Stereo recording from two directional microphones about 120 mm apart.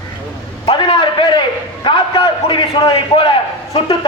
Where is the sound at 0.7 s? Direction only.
40° left (ahead or behind).